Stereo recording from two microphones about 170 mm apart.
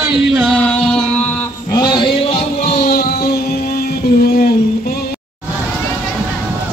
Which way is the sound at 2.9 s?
70° left (ahead or behind).